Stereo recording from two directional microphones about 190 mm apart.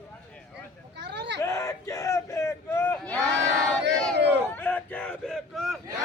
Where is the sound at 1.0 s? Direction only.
60° right (ahead or behind).